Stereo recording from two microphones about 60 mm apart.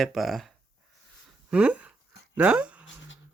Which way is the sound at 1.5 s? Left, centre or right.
Right.